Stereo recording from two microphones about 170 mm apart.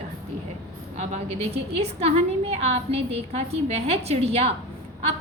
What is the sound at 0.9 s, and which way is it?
A woman's voice, 40° right (ahead or behind).